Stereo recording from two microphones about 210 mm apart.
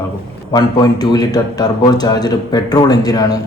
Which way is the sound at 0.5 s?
20° left (ahead or behind).